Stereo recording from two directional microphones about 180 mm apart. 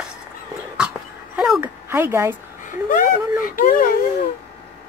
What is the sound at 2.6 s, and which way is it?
Speech, 50° left (ahead or behind).